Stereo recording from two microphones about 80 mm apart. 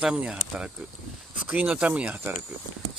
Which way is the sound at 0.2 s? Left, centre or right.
Centre.